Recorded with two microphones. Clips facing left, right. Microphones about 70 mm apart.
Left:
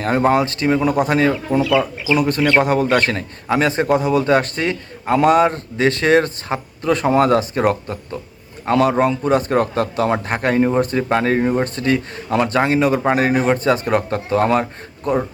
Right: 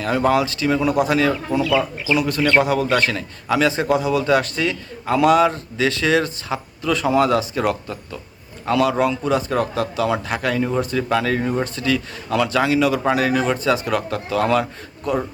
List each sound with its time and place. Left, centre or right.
0.0 s a man's voice: left
1.7 s speech: centre
2.1 s a man's voice: left